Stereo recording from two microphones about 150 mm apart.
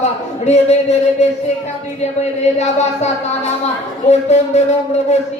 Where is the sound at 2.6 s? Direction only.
50° left (ahead or behind).